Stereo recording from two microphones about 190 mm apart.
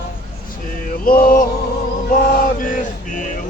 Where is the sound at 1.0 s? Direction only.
50° left (ahead or behind).